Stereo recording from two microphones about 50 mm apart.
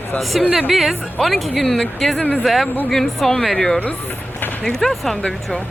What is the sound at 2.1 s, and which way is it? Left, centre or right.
Speech, left.